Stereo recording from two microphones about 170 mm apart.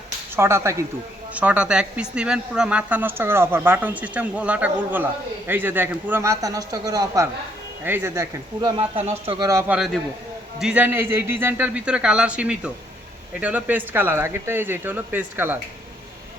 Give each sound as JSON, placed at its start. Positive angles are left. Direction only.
{"t": 0.3, "sound": "speech", "side_deg": -15}
{"t": 9.0, "sound": "speech", "side_deg": -35}
{"t": 9.5, "sound": "speech", "side_deg": -15}
{"t": 9.7, "sound": "a man's voice", "side_deg": 0}